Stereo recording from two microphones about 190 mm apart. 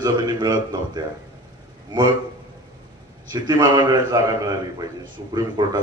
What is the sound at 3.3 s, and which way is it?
A man's voice, 25° right (ahead or behind).